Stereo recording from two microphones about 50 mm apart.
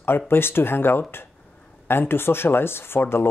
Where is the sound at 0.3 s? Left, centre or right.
Left.